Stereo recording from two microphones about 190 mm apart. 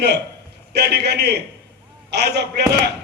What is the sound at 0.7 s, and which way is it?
A man's voice, 60° right (ahead or behind).